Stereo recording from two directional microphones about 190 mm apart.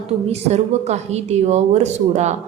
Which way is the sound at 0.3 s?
35° right (ahead or behind).